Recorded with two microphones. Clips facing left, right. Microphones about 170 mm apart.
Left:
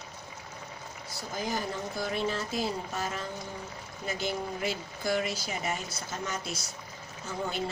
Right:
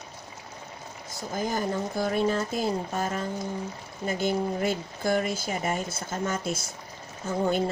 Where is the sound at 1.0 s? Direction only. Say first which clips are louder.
Right 4 dB; 50° right (ahead or behind).